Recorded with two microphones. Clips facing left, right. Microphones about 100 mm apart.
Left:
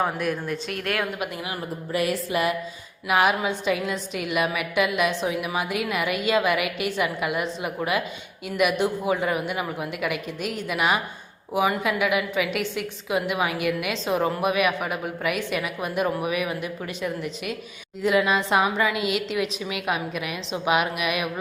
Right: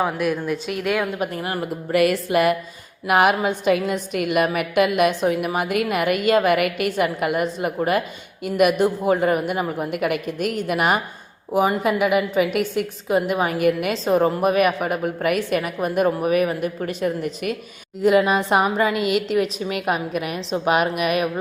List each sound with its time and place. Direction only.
0.0 s a woman's voice: 5° right (ahead or behind)
1.2 s a woman's voice: 45° right (ahead or behind)
1.9 s a sound: 65° right (ahead or behind)
3.1 s a woman's voice: 55° right (ahead or behind)